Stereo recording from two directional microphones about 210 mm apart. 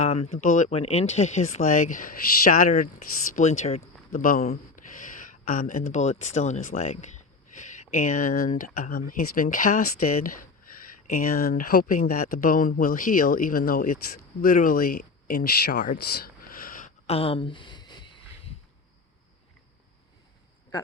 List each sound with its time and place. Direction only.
0.0 s speech: 30° left (ahead or behind)